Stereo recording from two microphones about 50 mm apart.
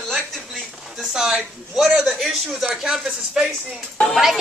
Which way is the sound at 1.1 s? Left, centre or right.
Centre.